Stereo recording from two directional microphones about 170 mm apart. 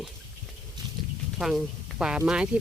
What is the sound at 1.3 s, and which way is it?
Speech, centre (ahead or behind).